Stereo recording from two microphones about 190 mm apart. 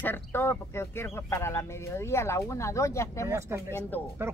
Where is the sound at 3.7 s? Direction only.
10° left (ahead or behind).